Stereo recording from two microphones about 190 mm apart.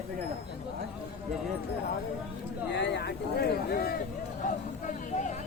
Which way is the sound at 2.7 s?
65° left (ahead or behind).